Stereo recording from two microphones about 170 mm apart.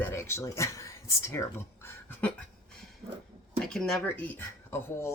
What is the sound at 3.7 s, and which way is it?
Speech, 5° left (ahead or behind).